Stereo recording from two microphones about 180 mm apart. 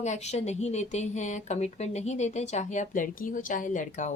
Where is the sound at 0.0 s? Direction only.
40° left (ahead or behind).